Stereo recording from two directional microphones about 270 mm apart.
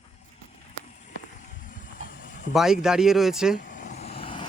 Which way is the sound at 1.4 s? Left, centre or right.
Left.